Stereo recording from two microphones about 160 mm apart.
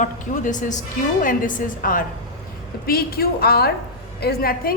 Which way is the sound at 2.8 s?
70° left (ahead or behind).